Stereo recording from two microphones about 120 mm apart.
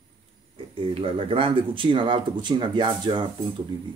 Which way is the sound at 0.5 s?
50° right (ahead or behind).